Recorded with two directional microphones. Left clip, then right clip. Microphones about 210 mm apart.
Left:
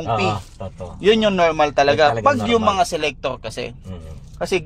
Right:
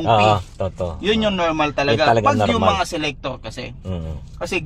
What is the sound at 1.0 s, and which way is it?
A man's voice, 55° left (ahead or behind).